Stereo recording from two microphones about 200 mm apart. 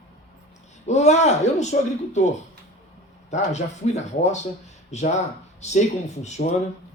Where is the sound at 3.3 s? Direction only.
35° left (ahead or behind).